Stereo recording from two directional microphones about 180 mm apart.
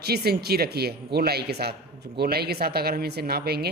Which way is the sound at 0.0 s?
60° right (ahead or behind).